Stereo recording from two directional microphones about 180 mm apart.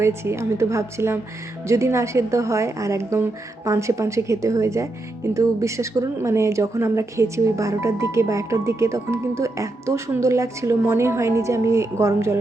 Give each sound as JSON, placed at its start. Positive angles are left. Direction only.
{"t": 0.0, "sound": "speech", "side_deg": -15}